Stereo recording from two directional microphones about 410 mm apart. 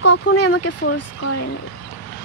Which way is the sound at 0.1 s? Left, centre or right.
Left.